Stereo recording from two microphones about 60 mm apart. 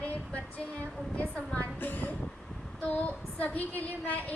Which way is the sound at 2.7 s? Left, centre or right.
Left.